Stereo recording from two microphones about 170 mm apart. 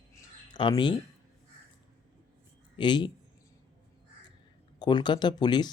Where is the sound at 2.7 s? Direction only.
25° left (ahead or behind).